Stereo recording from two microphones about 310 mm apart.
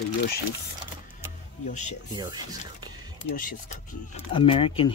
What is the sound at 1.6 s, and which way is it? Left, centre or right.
Speech, left.